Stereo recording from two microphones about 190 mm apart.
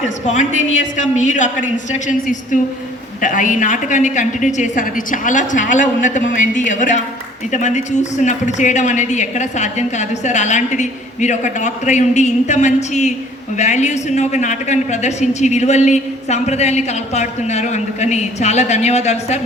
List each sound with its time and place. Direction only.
0.9 s speech: 40° left (ahead or behind)